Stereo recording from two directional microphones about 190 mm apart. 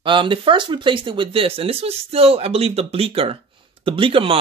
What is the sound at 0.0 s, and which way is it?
Speech, 25° right (ahead or behind).